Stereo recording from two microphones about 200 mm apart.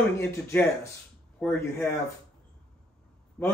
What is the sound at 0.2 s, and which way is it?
Speech, 15° left (ahead or behind).